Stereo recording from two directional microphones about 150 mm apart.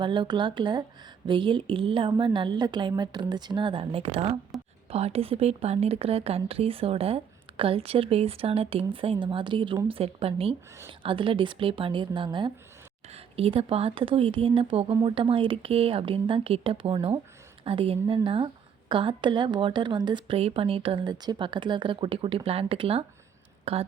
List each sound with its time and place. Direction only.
0.0 s a woman's voice: 30° right (ahead or behind)